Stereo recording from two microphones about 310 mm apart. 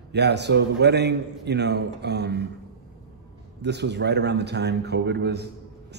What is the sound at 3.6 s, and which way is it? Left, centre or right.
A man's voice, right.